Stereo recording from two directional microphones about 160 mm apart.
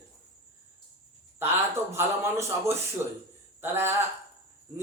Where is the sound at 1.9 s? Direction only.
15° right (ahead or behind).